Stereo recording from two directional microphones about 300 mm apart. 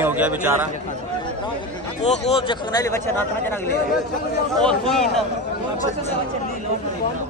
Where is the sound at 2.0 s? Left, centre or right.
Centre.